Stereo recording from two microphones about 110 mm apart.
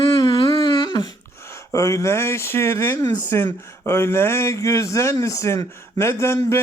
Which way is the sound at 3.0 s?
40° left (ahead or behind).